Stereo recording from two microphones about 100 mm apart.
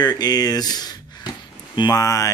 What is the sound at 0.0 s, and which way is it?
Speech, 45° left (ahead or behind).